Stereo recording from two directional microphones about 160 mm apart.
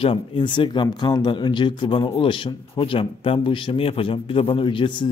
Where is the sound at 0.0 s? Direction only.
30° left (ahead or behind).